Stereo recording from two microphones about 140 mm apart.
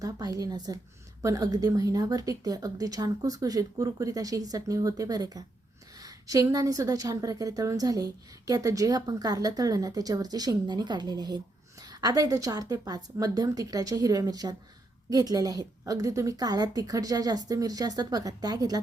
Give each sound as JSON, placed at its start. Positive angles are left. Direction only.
{"t": 0.0, "sound": "a woman's voice", "side_deg": -25}